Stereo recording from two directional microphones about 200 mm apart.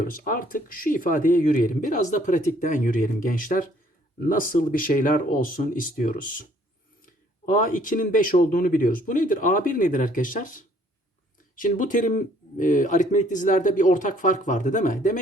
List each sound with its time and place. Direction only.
0.0 s speech: 45° left (ahead or behind)